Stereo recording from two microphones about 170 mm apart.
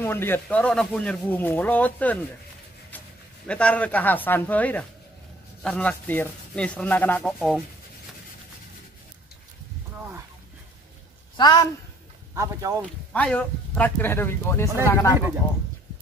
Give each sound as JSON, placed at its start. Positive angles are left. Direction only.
{"t": 0.0, "sound": "speech", "side_deg": 15}
{"t": 3.4, "sound": "speech", "side_deg": 5}
{"t": 11.3, "sound": "a woman's voice", "side_deg": 25}
{"t": 12.4, "sound": "speech", "side_deg": -20}
{"t": 13.1, "sound": "a woman's voice", "side_deg": 5}